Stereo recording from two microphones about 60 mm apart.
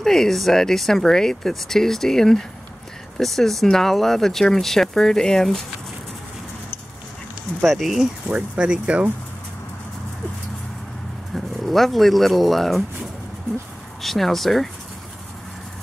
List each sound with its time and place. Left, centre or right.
0.0 s speech: centre
7.6 s speech: centre
8.3 s speech: centre
11.3 s speech: centre
14.0 s speech: centre